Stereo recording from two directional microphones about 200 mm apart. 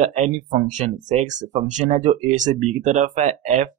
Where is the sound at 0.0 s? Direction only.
35° right (ahead or behind).